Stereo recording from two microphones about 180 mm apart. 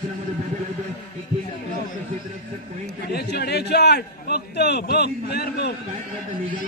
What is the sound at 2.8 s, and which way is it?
A man's voice, 65° left (ahead or behind).